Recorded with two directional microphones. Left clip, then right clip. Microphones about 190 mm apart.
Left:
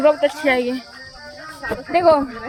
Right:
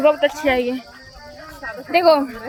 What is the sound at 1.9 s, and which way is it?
Speech, 5° right (ahead or behind).